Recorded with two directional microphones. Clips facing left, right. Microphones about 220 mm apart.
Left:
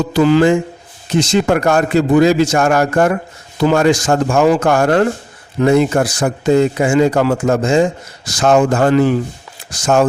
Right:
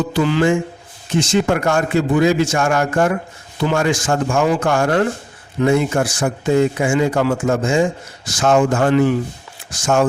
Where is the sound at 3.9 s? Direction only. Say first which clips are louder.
Left 5 dB; 40° left (ahead or behind).